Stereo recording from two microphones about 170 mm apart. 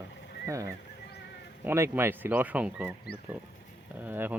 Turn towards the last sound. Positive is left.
turn(degrees=-10)  # may be behind; listen again after turning